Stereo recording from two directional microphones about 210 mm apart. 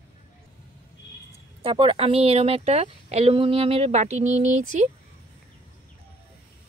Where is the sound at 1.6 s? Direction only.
25° right (ahead or behind).